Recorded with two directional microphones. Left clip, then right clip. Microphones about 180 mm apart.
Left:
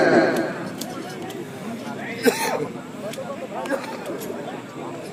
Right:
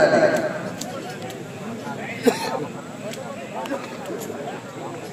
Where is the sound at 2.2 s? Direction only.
65° left (ahead or behind).